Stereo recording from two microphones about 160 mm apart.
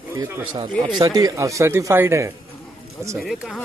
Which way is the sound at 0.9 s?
25° right (ahead or behind).